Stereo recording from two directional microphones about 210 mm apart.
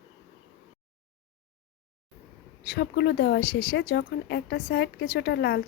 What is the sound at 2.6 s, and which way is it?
A woman's voice, 55° left (ahead or behind).